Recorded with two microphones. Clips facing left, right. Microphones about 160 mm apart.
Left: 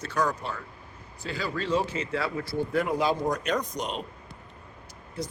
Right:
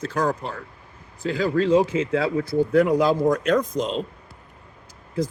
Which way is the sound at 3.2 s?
55° right (ahead or behind).